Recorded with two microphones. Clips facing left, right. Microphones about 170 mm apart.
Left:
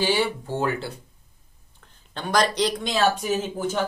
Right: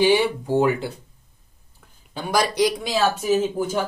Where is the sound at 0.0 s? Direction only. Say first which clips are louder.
Right 5 dB; 15° right (ahead or behind).